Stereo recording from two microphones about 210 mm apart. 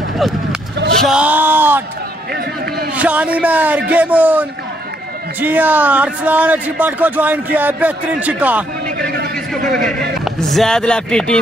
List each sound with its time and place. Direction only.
0.7 s basketball bounce: 55° right (ahead or behind)
1.0 s speech: 5° right (ahead or behind)
2.3 s speech: 50° right (ahead or behind)
2.9 s speech: 5° right (ahead or behind)
8.9 s a sound: 50° right (ahead or behind)
9.7 s speech: centre (ahead or behind)